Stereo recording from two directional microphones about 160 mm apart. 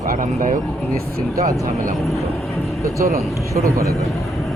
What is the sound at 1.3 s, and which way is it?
Speech, 20° right (ahead or behind).